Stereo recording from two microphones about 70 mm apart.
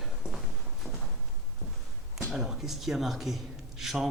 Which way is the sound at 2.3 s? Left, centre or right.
Centre.